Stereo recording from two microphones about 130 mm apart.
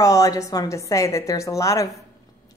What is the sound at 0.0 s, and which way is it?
A woman's voice, 25° left (ahead or behind).